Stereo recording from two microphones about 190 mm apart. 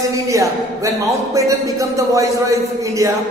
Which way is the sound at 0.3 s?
15° right (ahead or behind).